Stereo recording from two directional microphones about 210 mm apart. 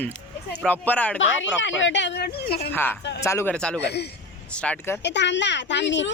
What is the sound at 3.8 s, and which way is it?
Speech, 50° left (ahead or behind).